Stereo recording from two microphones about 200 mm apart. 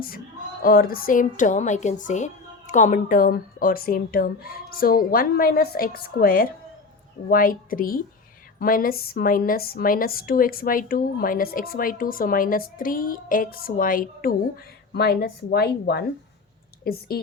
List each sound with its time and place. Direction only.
0.6 s a woman's voice: 45° left (ahead or behind)